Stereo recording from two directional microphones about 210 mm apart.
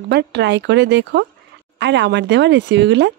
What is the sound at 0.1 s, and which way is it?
Speech, 55° right (ahead or behind).